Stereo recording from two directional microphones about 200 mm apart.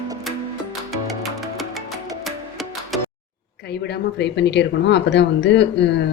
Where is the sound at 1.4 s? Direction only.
Centre (ahead or behind).